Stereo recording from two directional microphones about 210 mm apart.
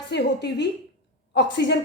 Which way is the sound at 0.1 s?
55° left (ahead or behind).